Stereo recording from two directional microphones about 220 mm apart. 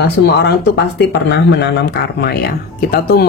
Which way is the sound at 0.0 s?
50° left (ahead or behind).